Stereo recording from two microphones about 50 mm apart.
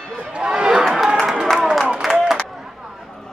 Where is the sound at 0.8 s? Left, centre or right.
Centre.